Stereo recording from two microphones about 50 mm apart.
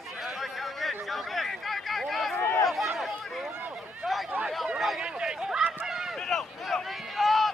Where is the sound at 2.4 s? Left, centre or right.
Left.